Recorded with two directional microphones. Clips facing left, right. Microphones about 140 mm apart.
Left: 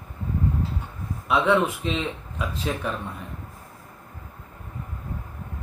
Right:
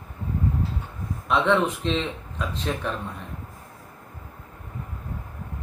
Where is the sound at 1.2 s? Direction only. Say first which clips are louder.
Left 1 dB; 5° left (ahead or behind).